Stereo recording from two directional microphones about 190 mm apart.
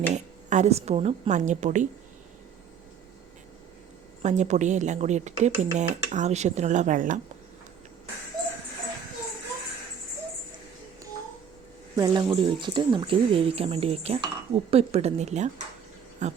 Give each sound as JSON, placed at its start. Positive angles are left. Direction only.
{"t": 0.1, "sound": "speech", "side_deg": -35}
{"t": 4.2, "sound": "speech", "side_deg": -40}
{"t": 11.9, "sound": "speech", "side_deg": -20}